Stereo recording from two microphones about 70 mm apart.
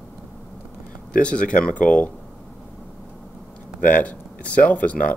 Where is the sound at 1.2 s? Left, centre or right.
Centre.